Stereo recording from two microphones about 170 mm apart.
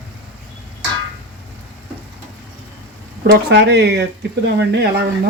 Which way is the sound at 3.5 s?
80° right.